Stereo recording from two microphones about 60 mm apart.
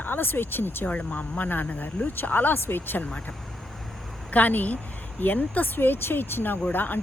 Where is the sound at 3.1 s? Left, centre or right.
Centre.